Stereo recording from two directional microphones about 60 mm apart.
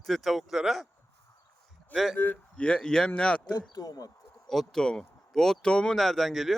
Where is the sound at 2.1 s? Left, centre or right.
Left.